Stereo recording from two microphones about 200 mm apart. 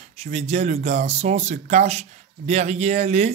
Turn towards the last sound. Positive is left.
turn(degrees=-35)  # may be behind; listen again after turning